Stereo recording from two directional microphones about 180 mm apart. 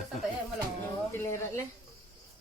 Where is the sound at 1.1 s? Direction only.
15° left (ahead or behind).